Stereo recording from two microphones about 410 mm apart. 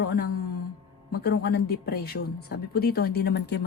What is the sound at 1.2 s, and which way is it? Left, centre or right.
Speech, left.